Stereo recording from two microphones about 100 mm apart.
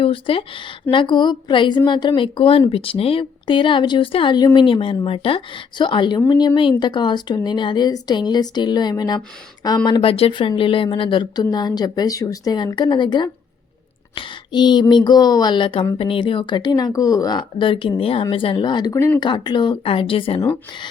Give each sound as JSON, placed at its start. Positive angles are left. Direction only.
{"t": 0.0, "sound": "a woman's voice", "side_deg": 65}
{"t": 4.4, "sound": "a woman's voice", "side_deg": 50}
{"t": 10.1, "sound": "a woman's voice", "side_deg": 70}
{"t": 18.9, "sound": "speech", "side_deg": 30}
{"t": 19.2, "sound": "a woman's voice", "side_deg": 45}